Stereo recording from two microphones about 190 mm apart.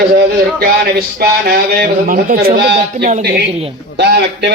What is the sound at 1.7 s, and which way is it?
Speech, 50° right (ahead or behind).